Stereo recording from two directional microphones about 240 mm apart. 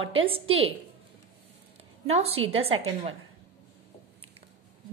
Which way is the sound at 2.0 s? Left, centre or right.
Right.